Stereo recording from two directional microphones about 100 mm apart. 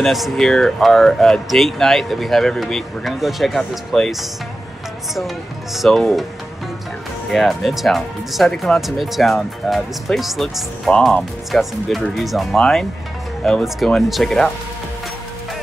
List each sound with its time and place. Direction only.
0.0 s speech: centre (ahead or behind)
7.2 s speech: centre (ahead or behind)